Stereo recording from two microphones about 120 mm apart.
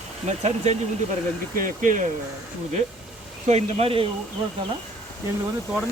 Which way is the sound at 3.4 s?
60° right (ahead or behind).